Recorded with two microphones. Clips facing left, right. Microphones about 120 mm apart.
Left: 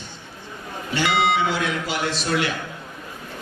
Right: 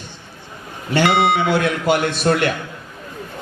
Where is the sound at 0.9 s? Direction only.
60° right (ahead or behind).